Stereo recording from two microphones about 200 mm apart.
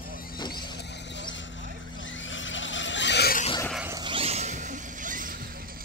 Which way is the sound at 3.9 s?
25° right (ahead or behind).